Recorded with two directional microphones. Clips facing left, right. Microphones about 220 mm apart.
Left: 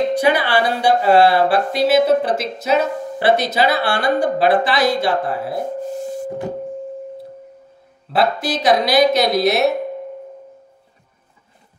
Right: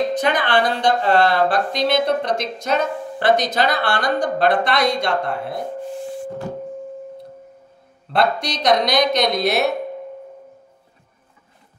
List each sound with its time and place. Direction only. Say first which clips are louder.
0.1 s speech: left 3 dB; 10° left (ahead or behind)
5.8 s a sound: left 3 dB; 40° left (ahead or behind)
8.1 s a woman's voice: left 2 dB; 5° left (ahead or behind)